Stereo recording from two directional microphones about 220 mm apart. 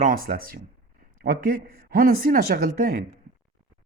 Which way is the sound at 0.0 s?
40° right (ahead or behind).